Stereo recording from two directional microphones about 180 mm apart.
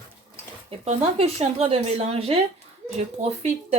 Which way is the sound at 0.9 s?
35° right (ahead or behind).